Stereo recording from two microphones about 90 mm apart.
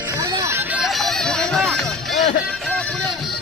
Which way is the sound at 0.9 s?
Centre (ahead or behind).